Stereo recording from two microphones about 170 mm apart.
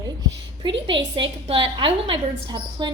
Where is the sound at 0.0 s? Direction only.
20° right (ahead or behind).